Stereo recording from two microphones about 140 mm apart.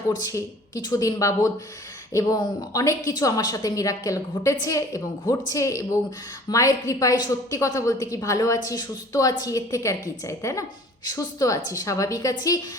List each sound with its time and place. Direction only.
0.1 s a woman's voice: 25° left (ahead or behind)